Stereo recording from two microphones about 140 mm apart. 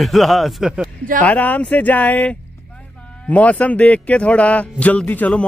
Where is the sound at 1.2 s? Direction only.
10° left (ahead or behind).